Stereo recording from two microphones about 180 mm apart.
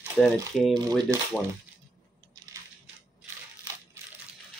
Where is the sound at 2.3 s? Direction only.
20° right (ahead or behind).